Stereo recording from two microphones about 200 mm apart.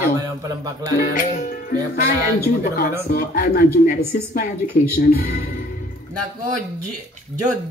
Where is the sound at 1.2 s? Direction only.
45° left (ahead or behind).